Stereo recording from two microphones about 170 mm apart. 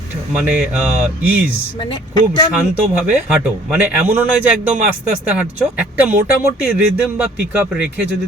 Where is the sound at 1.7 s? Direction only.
25° left (ahead or behind).